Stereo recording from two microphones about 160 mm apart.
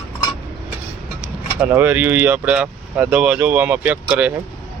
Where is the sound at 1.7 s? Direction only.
15° right (ahead or behind).